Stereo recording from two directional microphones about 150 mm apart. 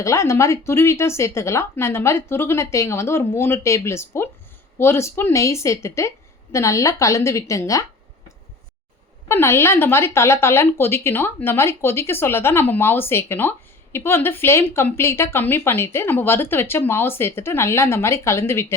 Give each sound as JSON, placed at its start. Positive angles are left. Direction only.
{"t": 0.0, "sound": "a woman's voice", "side_deg": 20}
{"t": 9.3, "sound": "speech", "side_deg": 15}